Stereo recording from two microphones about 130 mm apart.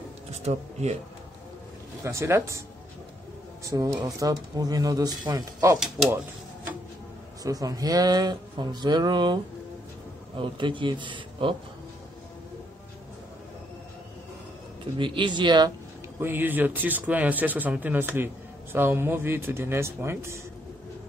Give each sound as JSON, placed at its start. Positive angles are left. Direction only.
{"t": 0.3, "sound": "speech", "side_deg": -55}
{"t": 2.0, "sound": "speech", "side_deg": -20}
{"t": 3.6, "sound": "speech", "side_deg": -25}
{"t": 7.4, "sound": "speech", "side_deg": -30}
{"t": 15.0, "sound": "speech", "side_deg": -40}
{"t": 16.2, "sound": "speech", "side_deg": -15}